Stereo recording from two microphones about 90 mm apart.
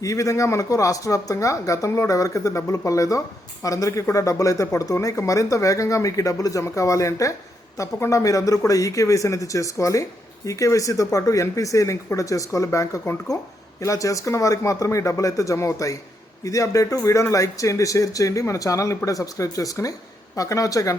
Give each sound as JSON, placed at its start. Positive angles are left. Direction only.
{"t": 0.0, "sound": "speech", "side_deg": 40}